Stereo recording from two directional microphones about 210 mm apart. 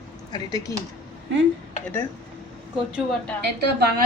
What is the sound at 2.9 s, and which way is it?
Speech, centre (ahead or behind).